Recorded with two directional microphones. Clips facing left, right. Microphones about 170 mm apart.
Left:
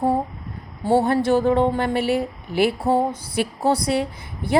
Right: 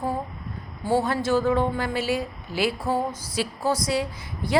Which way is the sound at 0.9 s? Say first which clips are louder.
Left 5 dB; 60° left (ahead or behind).